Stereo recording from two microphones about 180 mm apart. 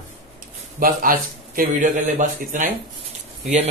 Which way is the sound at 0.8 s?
50° right (ahead or behind).